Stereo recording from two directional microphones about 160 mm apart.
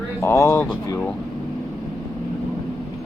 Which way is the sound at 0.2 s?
15° left (ahead or behind).